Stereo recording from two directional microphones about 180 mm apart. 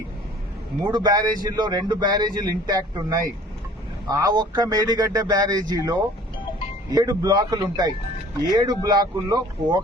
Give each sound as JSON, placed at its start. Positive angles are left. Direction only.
{"t": 0.9, "sound": "a man's voice", "side_deg": -25}